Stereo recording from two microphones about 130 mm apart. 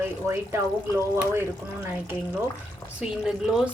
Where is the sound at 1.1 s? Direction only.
20° right (ahead or behind).